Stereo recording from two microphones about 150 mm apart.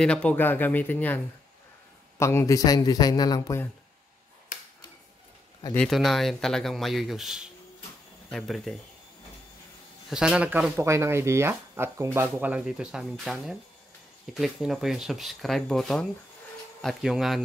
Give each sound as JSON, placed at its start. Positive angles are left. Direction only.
{"t": 0.0, "sound": "speech", "side_deg": 5}
{"t": 5.8, "sound": "speech", "side_deg": 0}
{"t": 10.0, "sound": "speech", "side_deg": -5}